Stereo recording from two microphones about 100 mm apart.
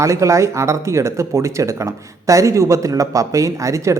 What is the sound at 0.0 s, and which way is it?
Speech, 30° right (ahead or behind).